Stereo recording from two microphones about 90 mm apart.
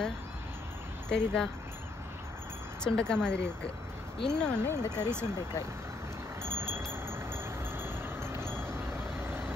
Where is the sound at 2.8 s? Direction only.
10° left (ahead or behind).